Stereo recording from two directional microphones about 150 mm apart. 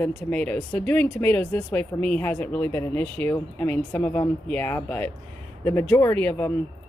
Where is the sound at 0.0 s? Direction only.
10° left (ahead or behind).